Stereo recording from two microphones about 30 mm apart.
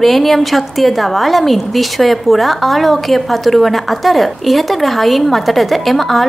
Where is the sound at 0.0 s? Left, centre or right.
Centre.